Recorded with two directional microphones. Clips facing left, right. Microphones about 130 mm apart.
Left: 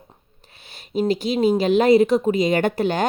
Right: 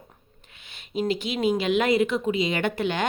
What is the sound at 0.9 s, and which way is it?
Speech, 40° left (ahead or behind).